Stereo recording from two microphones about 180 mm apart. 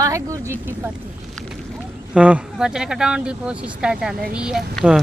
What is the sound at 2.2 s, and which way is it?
Speech, 5° right (ahead or behind).